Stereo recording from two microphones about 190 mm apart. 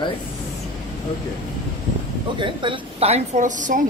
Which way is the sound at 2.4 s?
25° right (ahead or behind).